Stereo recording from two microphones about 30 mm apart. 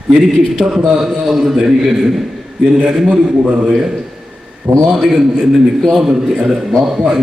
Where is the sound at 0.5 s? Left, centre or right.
Right.